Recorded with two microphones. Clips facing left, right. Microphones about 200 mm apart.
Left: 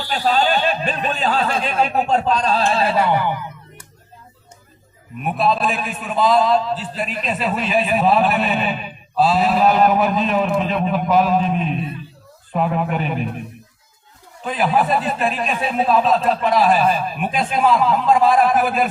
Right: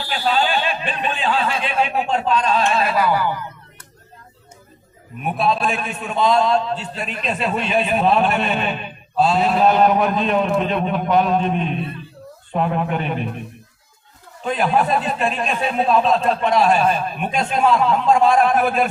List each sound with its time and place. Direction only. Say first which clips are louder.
0.1 s speech: left 2 dB; 40° left (ahead or behind); by 3.8 s 20° left (ahead or behind)
5.2 s a man's voice: left 1 dB; centre (ahead or behind)
14.4 s a man's voice: even; centre (ahead or behind)